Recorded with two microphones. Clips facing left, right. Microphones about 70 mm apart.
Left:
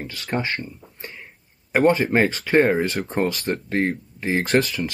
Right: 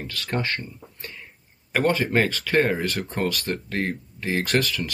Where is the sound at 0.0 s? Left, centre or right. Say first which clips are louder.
Left 2 dB; centre.